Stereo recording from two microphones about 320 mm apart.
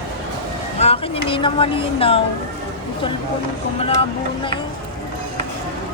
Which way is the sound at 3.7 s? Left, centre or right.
Centre.